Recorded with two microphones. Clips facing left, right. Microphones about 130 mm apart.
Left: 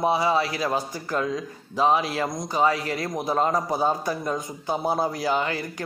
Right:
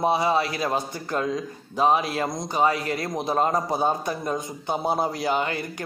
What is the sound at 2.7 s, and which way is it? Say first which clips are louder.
Speech: even; 25° left (ahead or behind).